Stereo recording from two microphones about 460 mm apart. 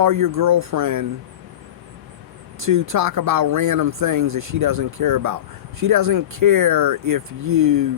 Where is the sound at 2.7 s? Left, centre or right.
Right.